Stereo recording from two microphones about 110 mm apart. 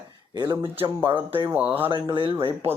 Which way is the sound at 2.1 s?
50° right (ahead or behind).